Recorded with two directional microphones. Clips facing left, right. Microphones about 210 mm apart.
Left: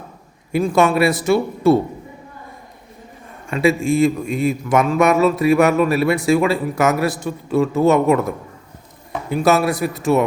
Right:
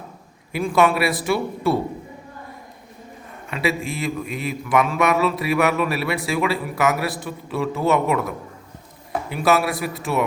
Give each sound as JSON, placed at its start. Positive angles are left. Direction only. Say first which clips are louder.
{"t": 0.5, "sound": "a man's voice", "louder": "left 3 dB", "side_deg": 45}
{"t": 3.5, "sound": "a man's voice", "louder": "left 8 dB", "side_deg": 45}
{"t": 9.3, "sound": "a man's voice", "louder": "left 4 dB", "side_deg": 45}